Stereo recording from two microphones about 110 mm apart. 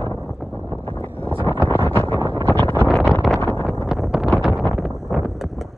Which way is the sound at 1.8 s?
15° left (ahead or behind).